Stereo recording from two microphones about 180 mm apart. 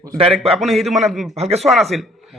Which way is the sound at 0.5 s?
Centre (ahead or behind).